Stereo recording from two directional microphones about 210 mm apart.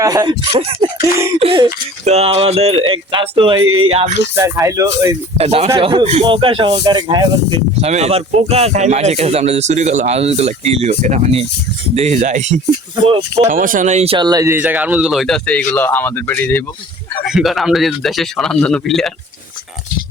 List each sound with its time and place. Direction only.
0.0 s speech: 15° right (ahead or behind)
3.6 s speech: 75° right (ahead or behind)
3.8 s speech: 30° right (ahead or behind)
4.4 s speech: 15° right (ahead or behind)
5.4 s speech: 30° right (ahead or behind)
13.1 s speech: 20° right (ahead or behind)
13.5 s speech: 40° right (ahead or behind); by 19.1 s centre (ahead or behind)